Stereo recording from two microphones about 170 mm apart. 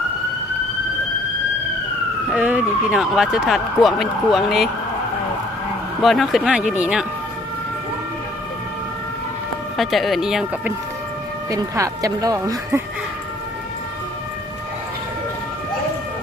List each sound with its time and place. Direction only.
2.3 s speech: 5° right (ahead or behind)
6.0 s speech: centre (ahead or behind)
9.7 s speech: centre (ahead or behind)
11.5 s speech: 20° right (ahead or behind)